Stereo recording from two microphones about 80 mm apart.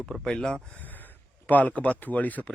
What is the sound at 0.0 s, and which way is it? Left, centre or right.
Speech, centre.